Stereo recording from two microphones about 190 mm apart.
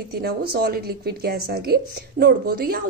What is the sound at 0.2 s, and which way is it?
A woman's voice, 55° right (ahead or behind).